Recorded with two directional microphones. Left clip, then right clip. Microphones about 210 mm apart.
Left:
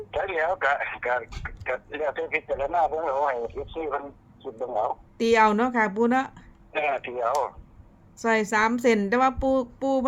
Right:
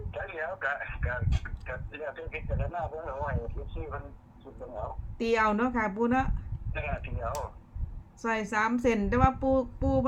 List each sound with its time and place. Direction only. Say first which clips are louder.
0.1 s a woman's voice: left 10 dB; 40° left (ahead or behind)